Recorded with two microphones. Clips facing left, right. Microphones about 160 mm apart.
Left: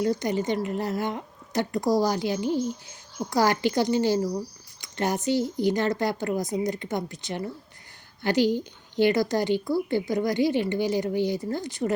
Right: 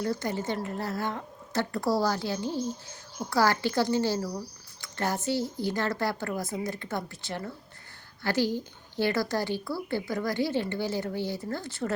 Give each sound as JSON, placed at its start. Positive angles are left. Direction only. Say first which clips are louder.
{"t": 0.0, "sound": "a woman's voice", "louder": "left 5 dB", "side_deg": 20}